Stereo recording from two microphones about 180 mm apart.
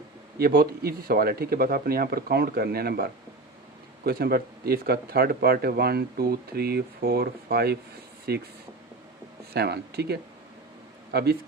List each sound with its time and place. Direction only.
0.3 s speech: 55° right (ahead or behind)
9.5 s speech: 60° right (ahead or behind)